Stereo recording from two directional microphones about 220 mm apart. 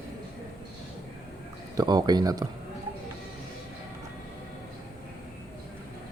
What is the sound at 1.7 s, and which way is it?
Speech, 20° right (ahead or behind).